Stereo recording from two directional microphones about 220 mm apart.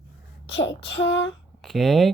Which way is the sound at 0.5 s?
55° left (ahead or behind).